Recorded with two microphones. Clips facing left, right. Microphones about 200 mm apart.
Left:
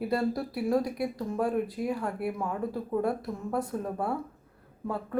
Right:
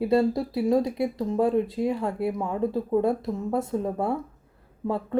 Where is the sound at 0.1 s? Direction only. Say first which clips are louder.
Right 7 dB; 25° right (ahead or behind).